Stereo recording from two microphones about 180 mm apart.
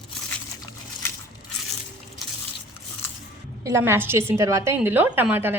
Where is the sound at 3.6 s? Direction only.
15° right (ahead or behind).